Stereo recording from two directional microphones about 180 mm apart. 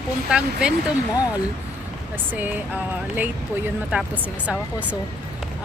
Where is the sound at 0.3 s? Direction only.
5° right (ahead or behind).